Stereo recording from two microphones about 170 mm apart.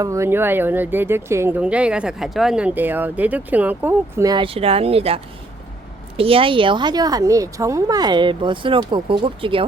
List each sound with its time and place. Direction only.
0.0 s speech: 15° right (ahead or behind)
4.3 s a woman's voice: 30° right (ahead or behind)